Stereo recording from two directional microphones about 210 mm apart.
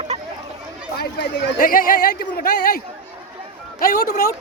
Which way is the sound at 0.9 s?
55° left (ahead or behind).